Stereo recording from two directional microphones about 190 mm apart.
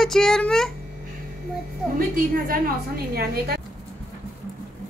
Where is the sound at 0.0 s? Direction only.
Centre (ahead or behind).